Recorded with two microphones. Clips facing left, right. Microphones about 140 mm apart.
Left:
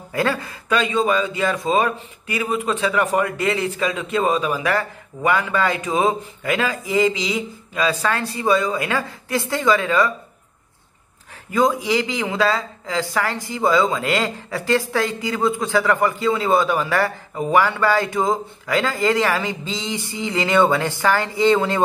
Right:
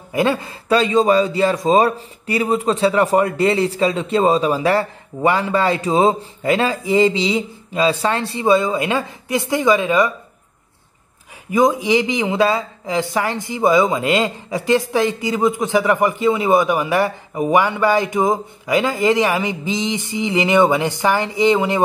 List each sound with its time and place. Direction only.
0.1 s a man's voice: 20° right (ahead or behind)
11.5 s speech: 20° right (ahead or behind)